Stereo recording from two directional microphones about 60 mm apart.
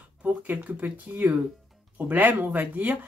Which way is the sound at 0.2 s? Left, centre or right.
Right.